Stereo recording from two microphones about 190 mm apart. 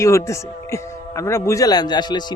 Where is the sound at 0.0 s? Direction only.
15° left (ahead or behind).